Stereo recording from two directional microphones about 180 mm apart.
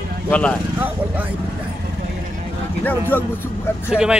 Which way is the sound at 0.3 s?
5° left (ahead or behind).